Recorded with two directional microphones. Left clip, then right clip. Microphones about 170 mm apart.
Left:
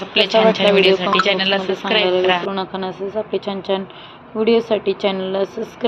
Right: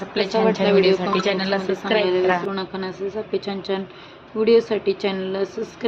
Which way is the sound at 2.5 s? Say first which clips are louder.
Left 4 dB; 10° left (ahead or behind).